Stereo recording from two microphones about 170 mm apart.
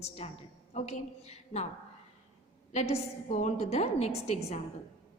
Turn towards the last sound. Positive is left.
turn(degrees=40)  # may be behind; listen again after turning